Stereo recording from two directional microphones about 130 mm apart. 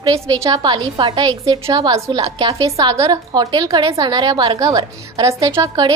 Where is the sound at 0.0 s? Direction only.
30° right (ahead or behind).